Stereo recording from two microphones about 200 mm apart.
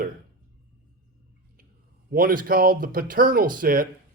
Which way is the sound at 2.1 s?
45° right (ahead or behind).